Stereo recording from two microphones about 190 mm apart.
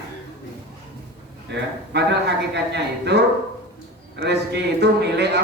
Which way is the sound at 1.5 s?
60° right (ahead or behind).